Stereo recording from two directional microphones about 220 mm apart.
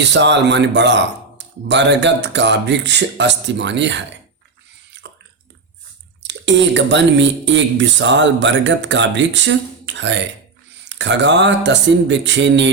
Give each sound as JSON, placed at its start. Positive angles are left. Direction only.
{"t": 0.0, "sound": "speech", "side_deg": -50}
{"t": 5.0, "sound": "a sound", "side_deg": -50}
{"t": 6.2, "sound": "speech", "side_deg": -55}